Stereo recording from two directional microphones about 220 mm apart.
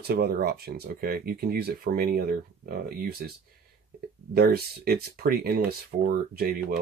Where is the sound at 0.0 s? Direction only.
45° right (ahead or behind).